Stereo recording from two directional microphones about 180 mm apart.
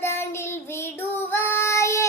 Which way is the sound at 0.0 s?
15° left (ahead or behind).